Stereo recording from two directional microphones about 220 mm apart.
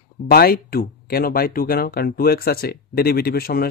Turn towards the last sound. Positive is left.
turn(degrees=45)  # may be behind; listen again after turning